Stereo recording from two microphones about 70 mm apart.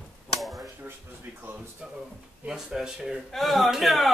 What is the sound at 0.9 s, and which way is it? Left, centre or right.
Speech, right.